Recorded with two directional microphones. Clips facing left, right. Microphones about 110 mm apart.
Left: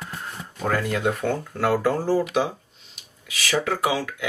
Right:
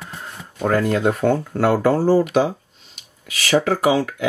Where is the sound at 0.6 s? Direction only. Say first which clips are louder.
Right 6 dB; 40° right (ahead or behind); by 2.2 s 55° right (ahead or behind).